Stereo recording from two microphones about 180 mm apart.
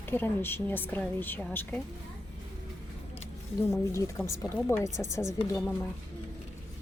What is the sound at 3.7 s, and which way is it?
A woman's voice, 15° left (ahead or behind).